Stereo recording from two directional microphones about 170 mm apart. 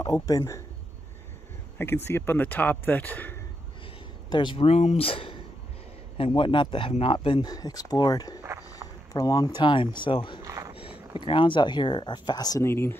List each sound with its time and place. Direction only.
0.0 s a man's voice: 20° left (ahead or behind)
1.8 s speech: 15° left (ahead or behind)
4.3 s speech: 25° left (ahead or behind)
10.4 s a sound: 20° right (ahead or behind)
11.1 s speech: 30° left (ahead or behind)